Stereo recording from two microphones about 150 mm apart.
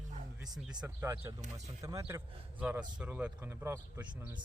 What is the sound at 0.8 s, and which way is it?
A man's voice, 15° right (ahead or behind).